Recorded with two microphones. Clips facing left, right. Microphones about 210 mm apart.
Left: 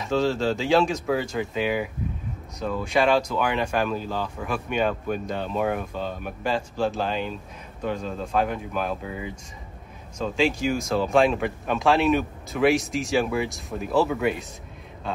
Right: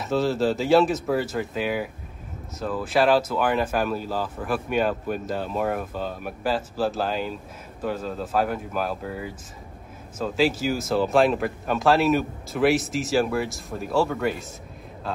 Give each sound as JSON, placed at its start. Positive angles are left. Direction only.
{"t": 0.0, "sound": "speech", "side_deg": -5}